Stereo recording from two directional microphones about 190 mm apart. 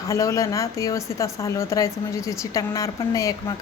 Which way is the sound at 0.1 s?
15° left (ahead or behind).